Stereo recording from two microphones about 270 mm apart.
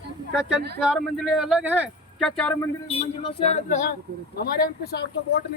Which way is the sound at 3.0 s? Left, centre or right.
Left.